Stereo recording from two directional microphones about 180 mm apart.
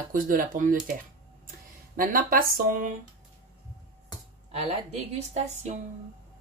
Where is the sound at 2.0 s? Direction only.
50° right (ahead or behind).